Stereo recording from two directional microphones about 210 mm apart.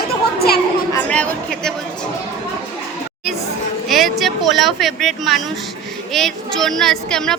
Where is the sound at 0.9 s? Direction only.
5° left (ahead or behind).